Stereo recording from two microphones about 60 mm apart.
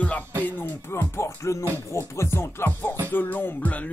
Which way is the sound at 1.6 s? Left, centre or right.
Right.